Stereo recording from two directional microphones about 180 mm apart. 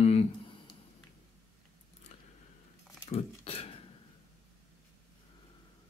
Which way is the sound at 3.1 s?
35° left (ahead or behind).